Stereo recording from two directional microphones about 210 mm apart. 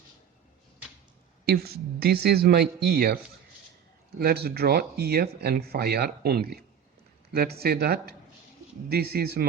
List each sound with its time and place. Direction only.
1.5 s speech: 50° right (ahead or behind)
4.2 s speech: 45° right (ahead or behind)